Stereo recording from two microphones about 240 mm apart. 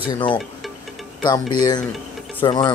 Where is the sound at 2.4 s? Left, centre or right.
Centre.